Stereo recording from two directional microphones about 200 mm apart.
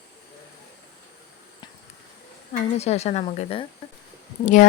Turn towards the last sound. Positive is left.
turn(degrees=40)  # may be behind; listen again after turning